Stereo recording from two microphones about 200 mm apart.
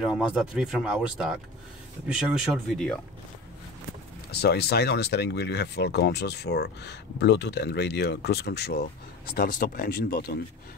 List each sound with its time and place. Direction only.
0.0 s speech: 5° right (ahead or behind)
4.3 s speech: 55° left (ahead or behind)